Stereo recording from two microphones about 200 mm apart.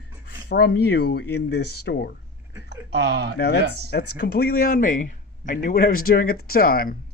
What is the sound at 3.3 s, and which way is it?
Speech, 55° left (ahead or behind).